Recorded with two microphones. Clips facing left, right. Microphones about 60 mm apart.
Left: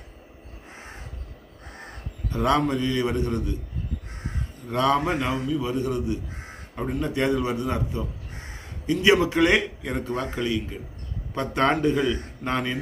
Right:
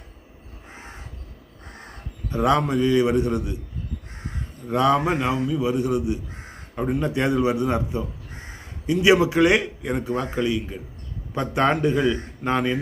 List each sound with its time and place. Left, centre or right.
2.3 s speech: centre
4.7 s speech: centre